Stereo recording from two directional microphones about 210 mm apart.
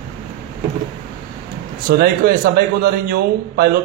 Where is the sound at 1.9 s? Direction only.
45° right (ahead or behind).